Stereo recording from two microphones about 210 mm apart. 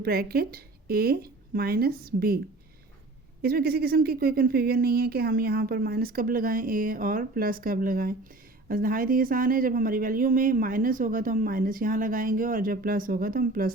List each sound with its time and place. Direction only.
0.0 s speech: 45° right (ahead or behind)
3.4 s speech: 45° right (ahead or behind)